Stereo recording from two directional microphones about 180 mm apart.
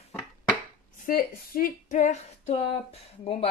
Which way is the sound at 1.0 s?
55° left (ahead or behind).